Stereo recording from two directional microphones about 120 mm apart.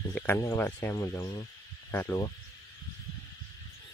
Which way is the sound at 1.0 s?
30° left (ahead or behind).